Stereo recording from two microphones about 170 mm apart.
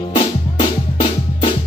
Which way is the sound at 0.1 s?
25° left (ahead or behind).